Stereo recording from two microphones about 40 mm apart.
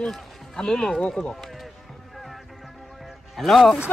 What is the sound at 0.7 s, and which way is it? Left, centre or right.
Speech, centre.